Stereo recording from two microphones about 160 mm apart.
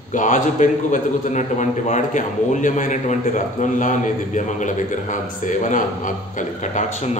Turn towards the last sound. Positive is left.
turn(degrees=50)  # may be behind; listen again after turning